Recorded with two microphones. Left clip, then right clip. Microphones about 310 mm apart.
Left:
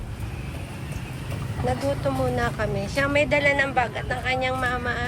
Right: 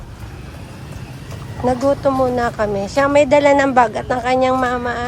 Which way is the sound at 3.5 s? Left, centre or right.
Right.